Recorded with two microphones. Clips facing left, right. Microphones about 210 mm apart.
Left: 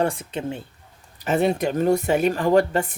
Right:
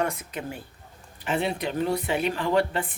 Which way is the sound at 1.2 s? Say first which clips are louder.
Left 7 dB; 45° left (ahead or behind).